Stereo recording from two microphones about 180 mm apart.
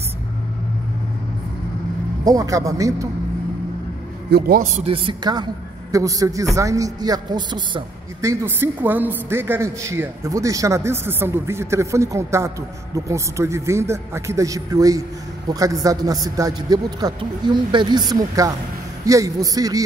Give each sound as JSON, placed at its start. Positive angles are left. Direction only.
{"t": 2.2, "sound": "a man's voice", "side_deg": -20}
{"t": 4.3, "sound": "a man's voice", "side_deg": -55}
{"t": 4.8, "sound": "a man's voice", "side_deg": -30}
{"t": 19.0, "sound": "a man's voice", "side_deg": -20}